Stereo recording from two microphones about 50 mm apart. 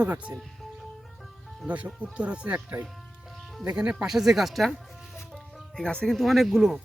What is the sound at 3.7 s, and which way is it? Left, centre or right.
Speech, centre.